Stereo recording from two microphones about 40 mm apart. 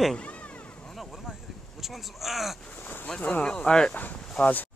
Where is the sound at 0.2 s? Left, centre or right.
Left.